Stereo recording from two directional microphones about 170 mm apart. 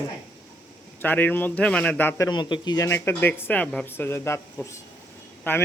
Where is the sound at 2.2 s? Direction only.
25° left (ahead or behind).